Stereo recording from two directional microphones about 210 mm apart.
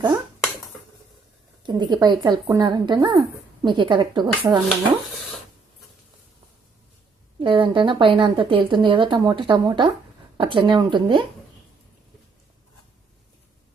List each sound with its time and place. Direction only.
1.6 s a woman's voice: 20° right (ahead or behind)
7.3 s a woman's voice: 25° right (ahead or behind)